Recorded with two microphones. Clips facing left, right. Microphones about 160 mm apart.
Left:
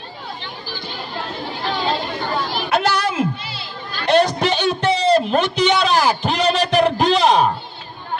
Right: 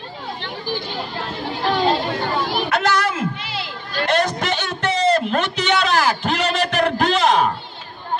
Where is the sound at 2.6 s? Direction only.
10° left (ahead or behind).